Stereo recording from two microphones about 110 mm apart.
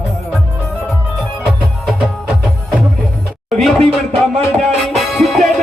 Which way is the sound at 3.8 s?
65° right (ahead or behind).